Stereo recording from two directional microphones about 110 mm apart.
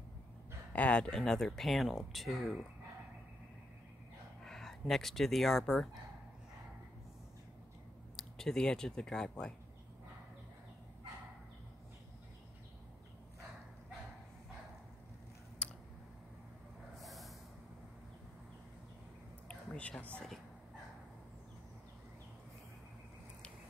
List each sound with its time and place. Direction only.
0.7 s speech: 10° left (ahead or behind)
4.5 s speech: centre (ahead or behind)
8.2 s speech: 5° left (ahead or behind)
15.6 s scissors: 10° left (ahead or behind)
17.0 s vehicle: centre (ahead or behind)
19.4 s a sound: 10° left (ahead or behind)